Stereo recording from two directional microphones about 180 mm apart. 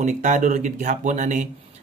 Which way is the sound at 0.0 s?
45° right (ahead or behind).